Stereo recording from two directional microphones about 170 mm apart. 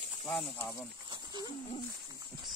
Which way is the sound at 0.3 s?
15° left (ahead or behind).